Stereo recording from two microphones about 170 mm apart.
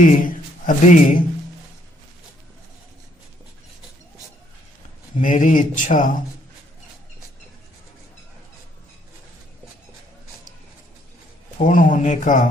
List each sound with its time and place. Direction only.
0.0 s speech: 55° left (ahead or behind)
5.2 s speech: 50° left (ahead or behind)
11.5 s speech: 50° left (ahead or behind)